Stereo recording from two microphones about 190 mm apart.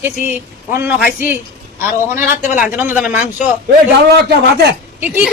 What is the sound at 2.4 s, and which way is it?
Speech, 45° left (ahead or behind).